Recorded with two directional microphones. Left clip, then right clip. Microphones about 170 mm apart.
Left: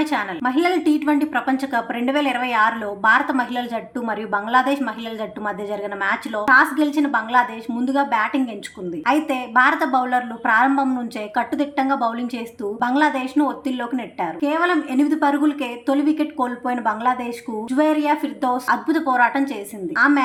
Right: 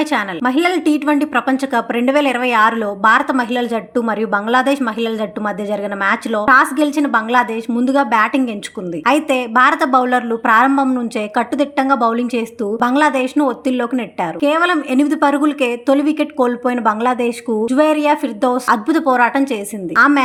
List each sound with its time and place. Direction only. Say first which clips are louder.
0.0 s a woman's voice: right 4 dB; 35° right (ahead or behind)
10.7 s a woman's voice: right 5 dB; 25° right (ahead or behind)